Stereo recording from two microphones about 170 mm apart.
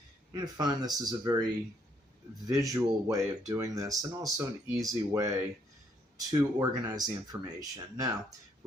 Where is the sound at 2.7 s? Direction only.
20° right (ahead or behind).